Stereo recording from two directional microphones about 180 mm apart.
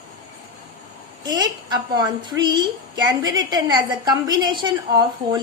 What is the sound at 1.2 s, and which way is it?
A woman's voice, 20° right (ahead or behind).